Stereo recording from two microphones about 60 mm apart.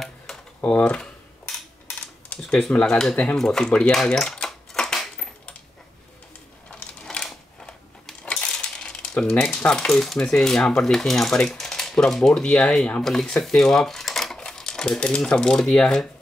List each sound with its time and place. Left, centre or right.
0.3 s computer keyboard: centre
0.7 s speech: left
2.9 s speech: centre
4.0 s typewriter: centre
6.7 s a sound: centre
7.6 s coin: centre
10.2 s speech: centre